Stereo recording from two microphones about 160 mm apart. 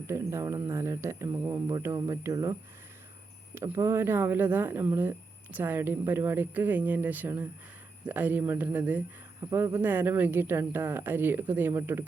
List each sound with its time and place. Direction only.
0.1 s speech: 15° right (ahead or behind)